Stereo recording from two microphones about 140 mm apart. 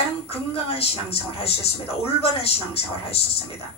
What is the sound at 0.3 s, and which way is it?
A woman's voice, 45° left (ahead or behind).